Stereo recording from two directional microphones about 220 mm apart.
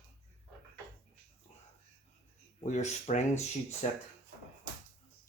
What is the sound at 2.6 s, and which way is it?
Speech, 30° left (ahead or behind).